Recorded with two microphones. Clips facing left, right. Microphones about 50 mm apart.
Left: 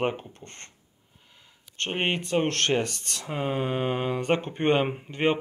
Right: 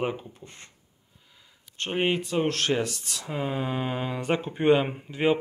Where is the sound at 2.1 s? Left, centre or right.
Centre.